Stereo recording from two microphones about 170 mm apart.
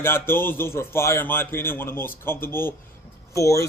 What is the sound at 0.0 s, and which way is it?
A man's voice, 15° left (ahead or behind).